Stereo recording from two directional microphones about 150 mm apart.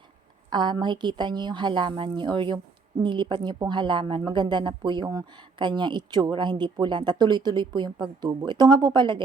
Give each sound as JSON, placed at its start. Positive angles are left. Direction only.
{"t": 0.5, "sound": "a woman's voice", "side_deg": -30}